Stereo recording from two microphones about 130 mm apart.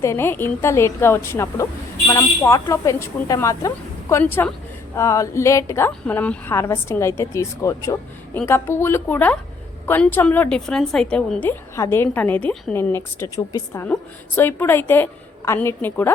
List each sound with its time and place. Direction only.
0.0 s a woman's voice: 20° left (ahead or behind)
13.8 s a woman's voice: 15° left (ahead or behind)